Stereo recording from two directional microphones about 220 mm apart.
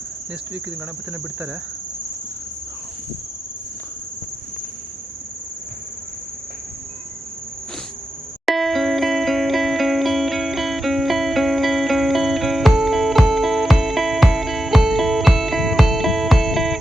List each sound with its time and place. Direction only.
8.4 s music: centre (ahead or behind)